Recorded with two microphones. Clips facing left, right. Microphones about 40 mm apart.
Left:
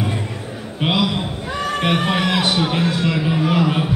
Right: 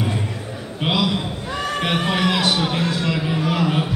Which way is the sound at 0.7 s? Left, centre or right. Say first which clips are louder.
Left 1 dB; centre.